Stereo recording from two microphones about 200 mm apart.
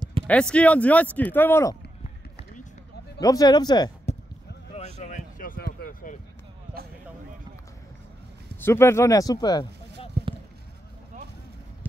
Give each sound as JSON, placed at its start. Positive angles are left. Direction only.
{"t": 0.3, "sound": "speech", "side_deg": 5}
{"t": 3.2, "sound": "speech", "side_deg": 20}
{"t": 4.7, "sound": "a sound", "side_deg": 35}
{"t": 8.5, "sound": "speech", "side_deg": 10}